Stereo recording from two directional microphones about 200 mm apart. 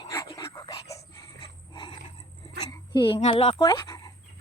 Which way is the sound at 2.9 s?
25° left (ahead or behind).